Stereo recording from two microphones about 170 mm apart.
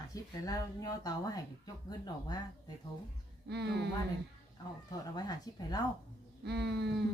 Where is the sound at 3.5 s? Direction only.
80° right.